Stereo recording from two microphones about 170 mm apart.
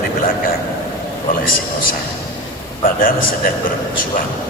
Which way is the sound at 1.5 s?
55° left (ahead or behind).